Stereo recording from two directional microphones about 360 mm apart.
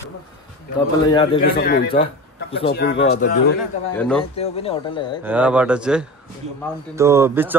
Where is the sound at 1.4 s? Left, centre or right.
Left.